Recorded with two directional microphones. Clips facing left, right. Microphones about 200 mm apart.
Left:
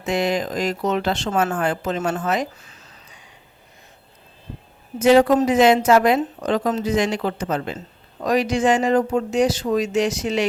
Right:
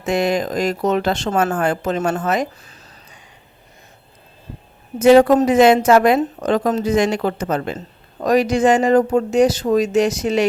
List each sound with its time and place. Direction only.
0.0 s speech: 45° right (ahead or behind)
4.9 s speech: 50° right (ahead or behind)